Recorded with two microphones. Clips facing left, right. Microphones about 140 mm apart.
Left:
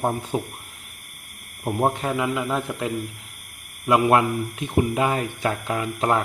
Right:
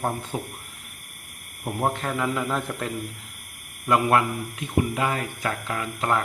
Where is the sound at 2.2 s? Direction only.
5° left (ahead or behind).